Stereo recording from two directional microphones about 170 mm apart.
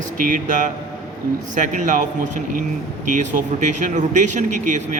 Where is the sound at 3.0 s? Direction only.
45° right (ahead or behind).